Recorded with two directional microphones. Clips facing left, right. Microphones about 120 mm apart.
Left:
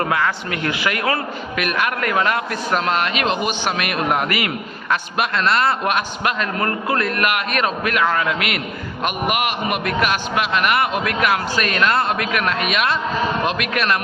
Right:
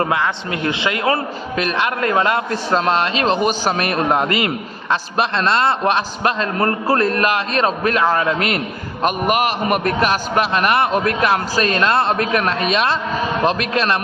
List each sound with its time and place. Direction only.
0.0 s a man's voice: 25° right (ahead or behind)